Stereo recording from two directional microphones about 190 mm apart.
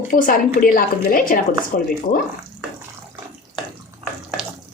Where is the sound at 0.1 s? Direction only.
45° left (ahead or behind).